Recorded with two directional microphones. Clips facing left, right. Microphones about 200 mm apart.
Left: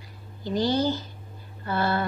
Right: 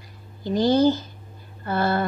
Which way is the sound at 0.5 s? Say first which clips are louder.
Right 6 dB; 45° right (ahead or behind).